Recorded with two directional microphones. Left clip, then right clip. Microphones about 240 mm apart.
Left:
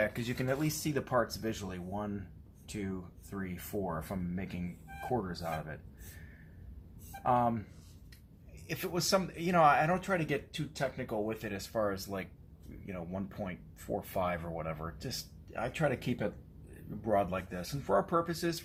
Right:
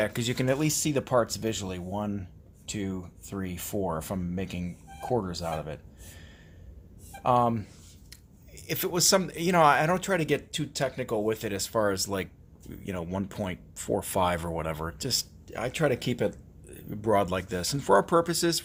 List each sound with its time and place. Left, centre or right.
0.0 s speech: right
7.3 s speech: right